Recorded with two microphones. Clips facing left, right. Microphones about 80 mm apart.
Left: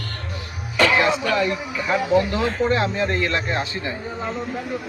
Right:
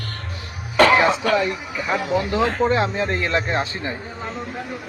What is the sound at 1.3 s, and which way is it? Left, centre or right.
A man's voice, right.